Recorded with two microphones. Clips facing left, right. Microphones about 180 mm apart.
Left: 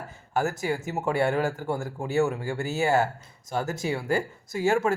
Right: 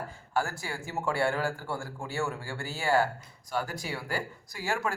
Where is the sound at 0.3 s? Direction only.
20° left (ahead or behind).